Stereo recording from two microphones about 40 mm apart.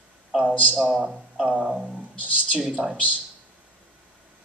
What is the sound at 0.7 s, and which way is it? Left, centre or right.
Speech, centre.